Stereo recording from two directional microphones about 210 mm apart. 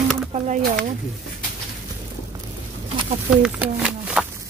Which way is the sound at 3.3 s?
5° right (ahead or behind).